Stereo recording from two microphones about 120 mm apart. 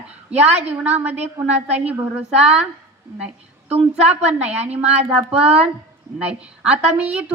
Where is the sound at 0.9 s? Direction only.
15° right (ahead or behind).